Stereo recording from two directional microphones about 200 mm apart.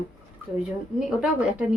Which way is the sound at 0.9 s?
5° right (ahead or behind).